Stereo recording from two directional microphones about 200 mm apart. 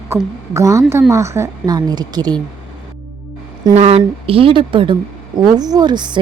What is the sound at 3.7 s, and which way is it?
Speech, 30° right (ahead or behind).